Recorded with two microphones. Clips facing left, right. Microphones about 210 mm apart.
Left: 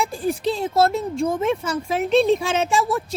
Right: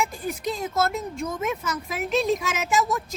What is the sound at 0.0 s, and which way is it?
A woman's voice, 30° left (ahead or behind).